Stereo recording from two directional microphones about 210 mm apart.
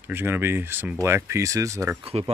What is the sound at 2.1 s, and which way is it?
Speech, 30° right (ahead or behind).